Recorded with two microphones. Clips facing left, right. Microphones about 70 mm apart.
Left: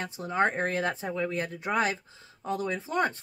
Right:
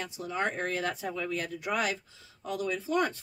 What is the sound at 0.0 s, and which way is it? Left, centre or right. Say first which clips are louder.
Speech: left 5 dB; left.